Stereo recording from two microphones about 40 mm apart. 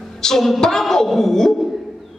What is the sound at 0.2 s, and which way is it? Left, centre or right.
A man's voice, centre.